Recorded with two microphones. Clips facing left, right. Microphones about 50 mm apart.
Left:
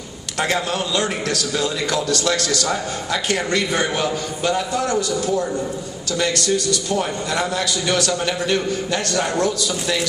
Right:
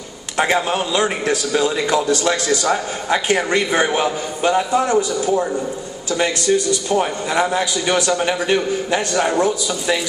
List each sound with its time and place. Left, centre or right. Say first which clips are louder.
0.4 s a man's voice: right 4 dB; centre